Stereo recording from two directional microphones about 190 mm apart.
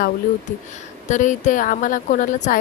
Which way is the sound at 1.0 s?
40° left (ahead or behind).